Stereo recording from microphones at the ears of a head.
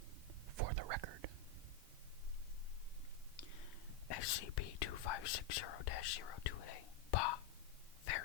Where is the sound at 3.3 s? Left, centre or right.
Left.